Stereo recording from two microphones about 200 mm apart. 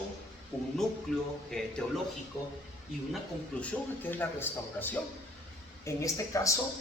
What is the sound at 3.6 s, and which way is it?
A man's voice, 10° left (ahead or behind).